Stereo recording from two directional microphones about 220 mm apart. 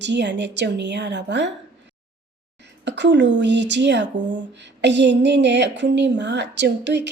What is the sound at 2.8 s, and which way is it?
Speech, 55° right (ahead or behind).